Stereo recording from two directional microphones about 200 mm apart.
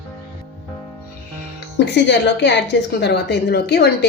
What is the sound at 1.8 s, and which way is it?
Speech, 60° left (ahead or behind).